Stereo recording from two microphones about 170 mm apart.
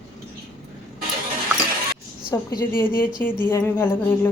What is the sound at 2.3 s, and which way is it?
A woman's voice, 20° left (ahead or behind).